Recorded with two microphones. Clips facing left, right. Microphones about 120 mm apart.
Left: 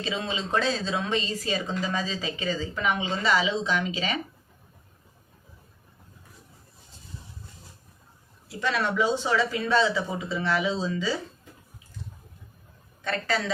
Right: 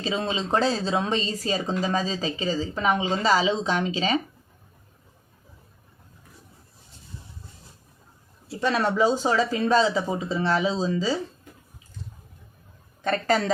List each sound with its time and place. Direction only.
0.0 s speech: 35° right (ahead or behind)
8.4 s speech: 35° right (ahead or behind)
13.1 s a woman's voice: 40° right (ahead or behind)